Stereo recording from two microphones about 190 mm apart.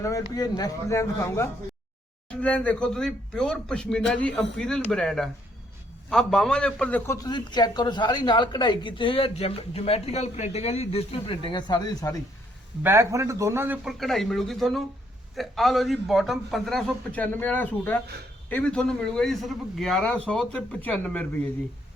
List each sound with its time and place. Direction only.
0.0 s a man's voice: 20° left (ahead or behind)
12.8 s speech: 15° right (ahead or behind)
14.0 s speech: centre (ahead or behind)